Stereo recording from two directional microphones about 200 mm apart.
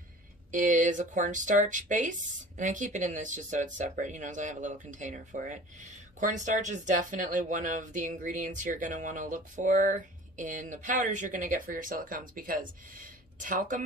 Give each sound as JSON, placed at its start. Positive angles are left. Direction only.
{"t": 0.5, "sound": "speech", "side_deg": -40}